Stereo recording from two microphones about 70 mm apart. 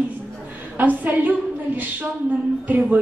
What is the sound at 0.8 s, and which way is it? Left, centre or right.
Speech, right.